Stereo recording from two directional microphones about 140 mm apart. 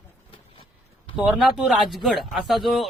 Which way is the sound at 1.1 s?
5° right (ahead or behind).